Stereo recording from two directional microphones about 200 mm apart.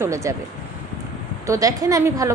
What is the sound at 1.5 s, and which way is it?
Speech, 15° right (ahead or behind).